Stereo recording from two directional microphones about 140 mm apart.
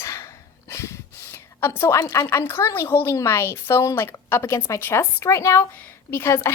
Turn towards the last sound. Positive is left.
turn(degrees=20)  # may be behind; listen again after turning